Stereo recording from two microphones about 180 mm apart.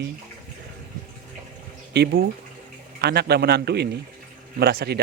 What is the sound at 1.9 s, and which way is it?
Speech, 65° right (ahead or behind).